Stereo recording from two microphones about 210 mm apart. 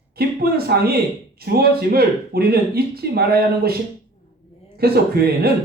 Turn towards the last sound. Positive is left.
turn(degrees=-45)  # may be behind; listen again after turning